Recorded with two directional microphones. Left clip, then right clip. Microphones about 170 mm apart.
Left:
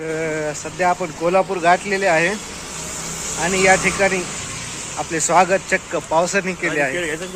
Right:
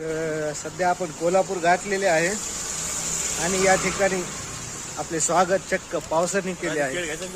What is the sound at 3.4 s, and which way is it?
Speech, 10° right (ahead or behind).